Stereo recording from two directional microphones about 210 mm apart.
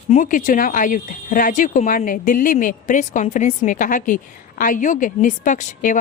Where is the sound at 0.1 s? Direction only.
40° left (ahead or behind).